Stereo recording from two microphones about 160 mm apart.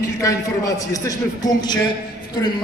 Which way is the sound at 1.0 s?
25° left (ahead or behind).